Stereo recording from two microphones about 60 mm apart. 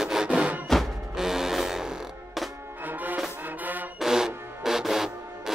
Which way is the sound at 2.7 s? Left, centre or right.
Right.